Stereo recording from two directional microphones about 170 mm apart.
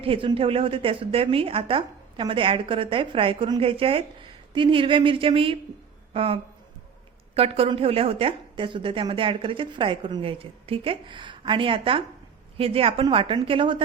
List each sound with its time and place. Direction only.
0.0 s a woman's voice: 30° right (ahead or behind)